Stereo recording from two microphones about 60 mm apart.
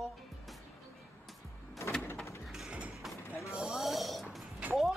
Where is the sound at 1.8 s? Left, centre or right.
Left.